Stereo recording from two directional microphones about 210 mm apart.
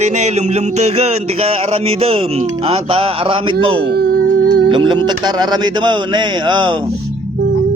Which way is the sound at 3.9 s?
50° right (ahead or behind).